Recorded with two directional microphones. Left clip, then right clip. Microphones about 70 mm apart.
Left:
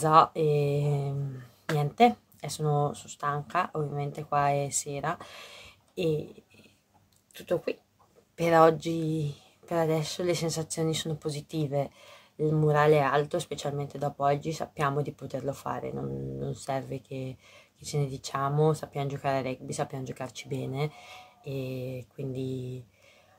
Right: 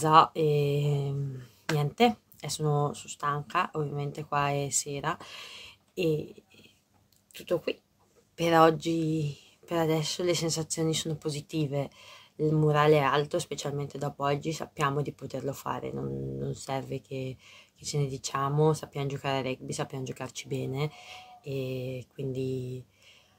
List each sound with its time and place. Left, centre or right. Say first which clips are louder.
0.0 s speech: even; centre
2.9 s speech: even; centre
7.3 s speech: even; left